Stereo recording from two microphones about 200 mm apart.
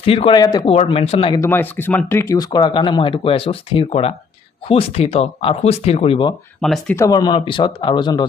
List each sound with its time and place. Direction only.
0.0 s speech: 30° left (ahead or behind)
0.6 s speech: 30° left (ahead or behind)
1.4 s speech: 10° left (ahead or behind); by 6.3 s 25° left (ahead or behind)
6.6 s speech: 5° left (ahead or behind)
6.9 s speech: 15° left (ahead or behind)